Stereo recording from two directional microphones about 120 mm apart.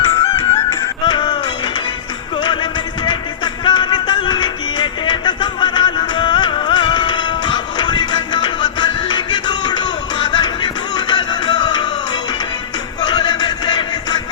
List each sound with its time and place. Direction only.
0.0 s music: 45° left (ahead or behind)
2.4 s music: 40° left (ahead or behind)
13.0 s music: 35° left (ahead or behind)